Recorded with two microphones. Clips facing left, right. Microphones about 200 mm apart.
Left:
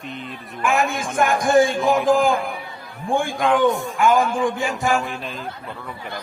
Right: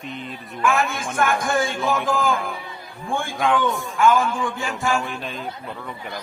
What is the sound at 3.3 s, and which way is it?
Speech, centre (ahead or behind).